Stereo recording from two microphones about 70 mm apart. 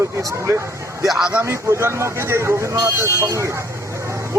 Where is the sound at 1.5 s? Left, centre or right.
Right.